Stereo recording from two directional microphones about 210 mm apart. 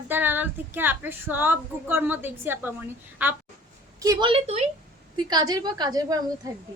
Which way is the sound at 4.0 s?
20° right (ahead or behind).